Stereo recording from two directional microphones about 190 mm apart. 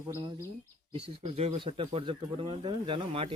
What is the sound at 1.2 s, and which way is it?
Speech, 35° right (ahead or behind).